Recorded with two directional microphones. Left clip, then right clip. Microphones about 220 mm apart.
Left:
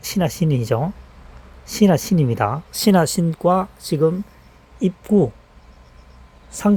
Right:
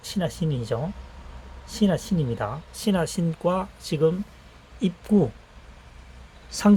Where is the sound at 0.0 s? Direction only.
35° left (ahead or behind); by 5.3 s 15° left (ahead or behind).